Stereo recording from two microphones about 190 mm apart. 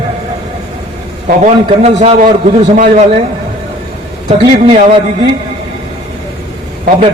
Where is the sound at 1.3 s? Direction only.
40° right (ahead or behind).